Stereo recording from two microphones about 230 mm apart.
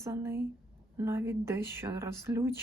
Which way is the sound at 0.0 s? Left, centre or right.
Centre.